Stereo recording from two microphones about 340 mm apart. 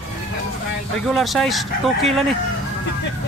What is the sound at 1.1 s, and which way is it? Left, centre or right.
Speech, centre.